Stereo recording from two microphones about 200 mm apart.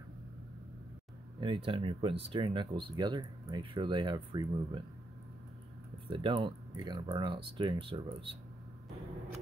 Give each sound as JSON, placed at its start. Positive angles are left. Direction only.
{"t": 1.4, "sound": "speech", "side_deg": -25}
{"t": 6.0, "sound": "speech", "side_deg": -25}